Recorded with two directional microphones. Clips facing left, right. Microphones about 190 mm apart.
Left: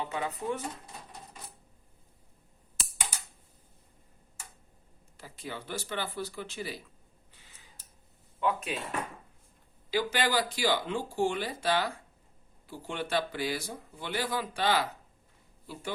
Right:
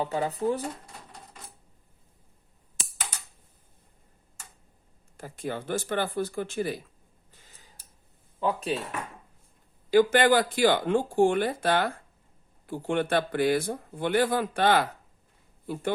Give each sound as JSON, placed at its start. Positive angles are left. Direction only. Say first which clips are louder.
{"t": 0.0, "sound": "speech", "louder": "right 7 dB", "side_deg": -35}
{"t": 5.1, "sound": "speech", "louder": "right 8 dB", "side_deg": -50}
{"t": 7.3, "sound": "a sound", "louder": "right 3 dB", "side_deg": -40}
{"t": 8.4, "sound": "speech", "louder": "right 3 dB", "side_deg": -35}
{"t": 9.9, "sound": "speech", "louder": "right 9 dB", "side_deg": -50}